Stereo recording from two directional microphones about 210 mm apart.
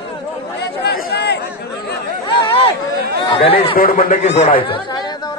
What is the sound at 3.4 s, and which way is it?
Speech, 25° left (ahead or behind).